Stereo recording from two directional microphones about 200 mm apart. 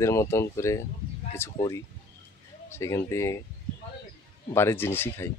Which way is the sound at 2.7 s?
15° left (ahead or behind).